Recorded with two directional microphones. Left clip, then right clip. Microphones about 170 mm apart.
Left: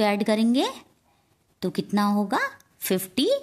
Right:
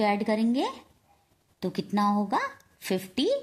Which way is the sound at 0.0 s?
35° left (ahead or behind).